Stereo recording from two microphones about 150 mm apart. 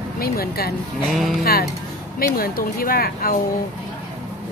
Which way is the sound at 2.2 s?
80° left.